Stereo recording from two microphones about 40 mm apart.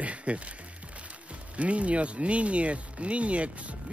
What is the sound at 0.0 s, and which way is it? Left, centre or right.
Music, right.